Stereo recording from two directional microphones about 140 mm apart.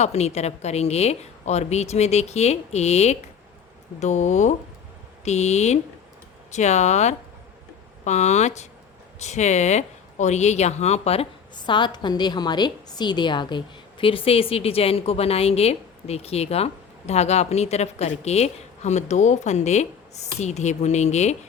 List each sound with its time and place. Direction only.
0.0 s a woman's voice: 50° left (ahead or behind)
11.5 s a woman's voice: 35° left (ahead or behind); by 21.3 s 55° left (ahead or behind)